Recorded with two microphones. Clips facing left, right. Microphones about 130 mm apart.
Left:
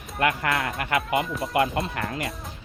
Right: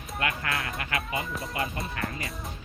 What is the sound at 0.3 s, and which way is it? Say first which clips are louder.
Speech: left 8 dB; 55° left (ahead or behind).